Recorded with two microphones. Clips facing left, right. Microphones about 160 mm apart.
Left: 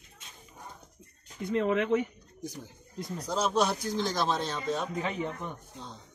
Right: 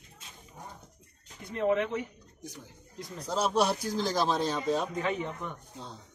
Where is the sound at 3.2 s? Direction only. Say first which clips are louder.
Even; 5° right (ahead or behind).